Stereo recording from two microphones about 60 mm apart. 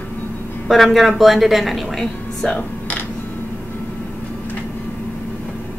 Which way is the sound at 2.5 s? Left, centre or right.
Left.